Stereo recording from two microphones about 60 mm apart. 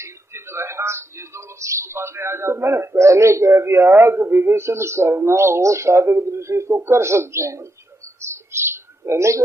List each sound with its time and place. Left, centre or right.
0.0 s a man's voice: right
3.1 s a man's voice: right
8.2 s a sound: right